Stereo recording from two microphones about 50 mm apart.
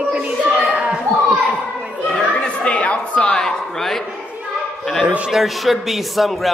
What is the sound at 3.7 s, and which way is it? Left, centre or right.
A man's voice, centre.